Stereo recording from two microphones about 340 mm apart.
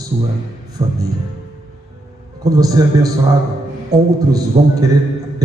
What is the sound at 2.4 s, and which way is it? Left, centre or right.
A man's voice, centre.